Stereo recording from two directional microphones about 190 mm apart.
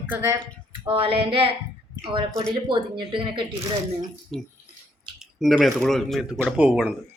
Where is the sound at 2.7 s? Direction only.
25° right (ahead or behind).